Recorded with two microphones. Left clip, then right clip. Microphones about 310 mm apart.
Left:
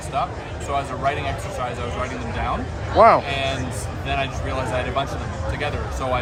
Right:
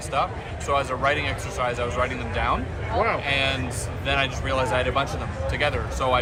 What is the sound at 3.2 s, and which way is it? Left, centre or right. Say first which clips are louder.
Speech: right 1 dB; centre.